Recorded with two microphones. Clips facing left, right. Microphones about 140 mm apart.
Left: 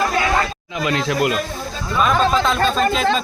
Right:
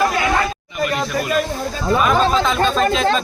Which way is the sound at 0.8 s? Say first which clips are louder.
Left 2 dB; 90° left.